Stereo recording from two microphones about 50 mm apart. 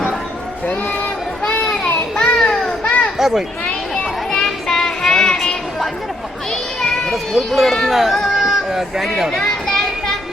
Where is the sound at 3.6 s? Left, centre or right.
Left.